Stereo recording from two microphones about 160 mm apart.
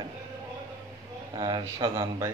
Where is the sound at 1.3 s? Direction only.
25° right (ahead or behind).